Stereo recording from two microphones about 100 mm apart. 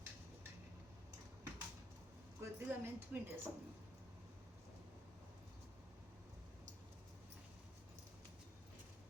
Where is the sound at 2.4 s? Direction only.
25° right (ahead or behind).